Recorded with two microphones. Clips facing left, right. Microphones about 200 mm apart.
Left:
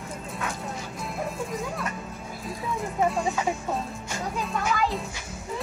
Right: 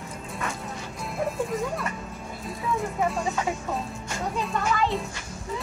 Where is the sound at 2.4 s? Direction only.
Centre (ahead or behind).